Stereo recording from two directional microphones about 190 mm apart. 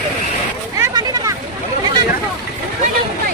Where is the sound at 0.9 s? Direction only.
20° right (ahead or behind).